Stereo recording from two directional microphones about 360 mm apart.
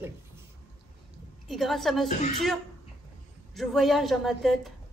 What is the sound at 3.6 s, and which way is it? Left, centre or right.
A woman's voice, centre.